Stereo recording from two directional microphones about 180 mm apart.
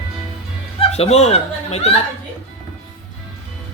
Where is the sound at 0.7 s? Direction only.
35° left (ahead or behind).